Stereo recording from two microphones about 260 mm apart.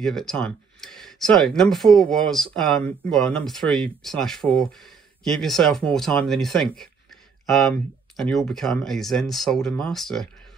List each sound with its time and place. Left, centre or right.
0.0 s speech: centre